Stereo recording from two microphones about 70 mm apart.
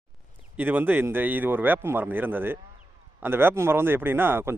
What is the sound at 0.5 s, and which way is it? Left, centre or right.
Speech, right.